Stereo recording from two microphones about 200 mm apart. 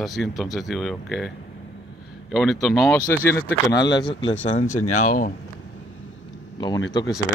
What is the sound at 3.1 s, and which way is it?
Speech, 15° left (ahead or behind).